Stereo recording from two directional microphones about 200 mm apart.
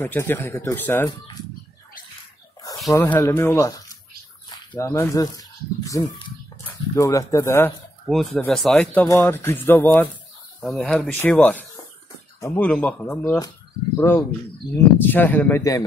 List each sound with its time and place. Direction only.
0.0 s speech: 10° left (ahead or behind)
2.9 s speech: 15° left (ahead or behind)
8.1 s speech: centre (ahead or behind)